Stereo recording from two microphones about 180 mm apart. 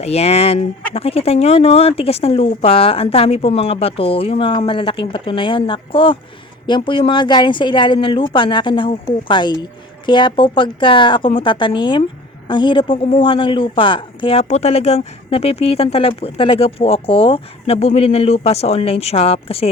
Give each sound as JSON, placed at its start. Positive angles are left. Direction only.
{"t": 0.0, "sound": "speech", "side_deg": 35}